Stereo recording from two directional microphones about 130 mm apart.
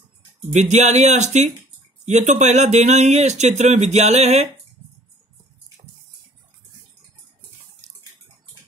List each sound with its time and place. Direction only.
0.5 s speech: 65° right (ahead or behind)